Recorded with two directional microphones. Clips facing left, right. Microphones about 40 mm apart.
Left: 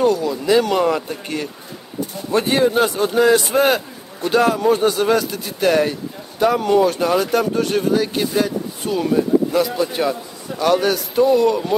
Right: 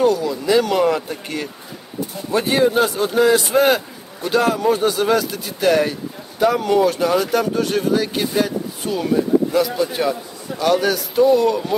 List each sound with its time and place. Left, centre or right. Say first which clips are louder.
0.0 s a man's voice: even; centre